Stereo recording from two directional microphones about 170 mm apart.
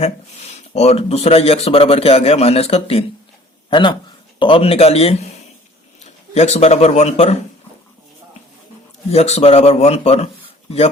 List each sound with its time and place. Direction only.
0.7 s a man's voice: 40° left (ahead or behind)
9.0 s a man's voice: 40° left (ahead or behind)